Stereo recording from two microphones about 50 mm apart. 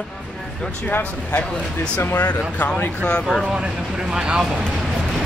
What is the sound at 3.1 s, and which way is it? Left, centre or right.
Speech, centre.